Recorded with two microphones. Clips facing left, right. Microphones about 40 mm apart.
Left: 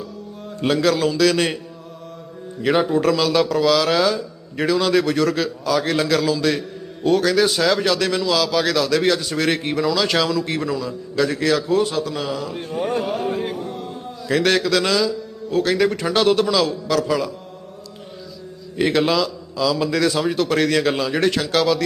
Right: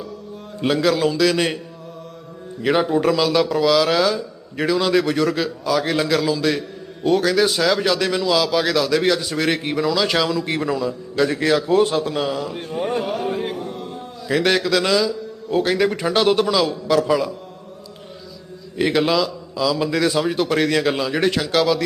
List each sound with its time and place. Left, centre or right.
0.6 s speech: centre
10.3 s a man's voice: centre
11.6 s a man's voice: right
12.5 s speech: centre
13.0 s a sound: centre
15.4 s speech: centre
18.8 s speech: centre